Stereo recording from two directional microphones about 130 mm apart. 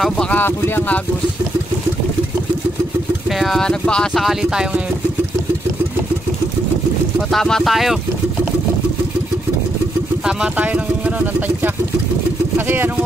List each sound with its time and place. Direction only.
0.0 s speech: 10° left (ahead or behind)
3.3 s speech: centre (ahead or behind)
7.2 s speech: 5° left (ahead or behind)
10.2 s speech: 10° right (ahead or behind)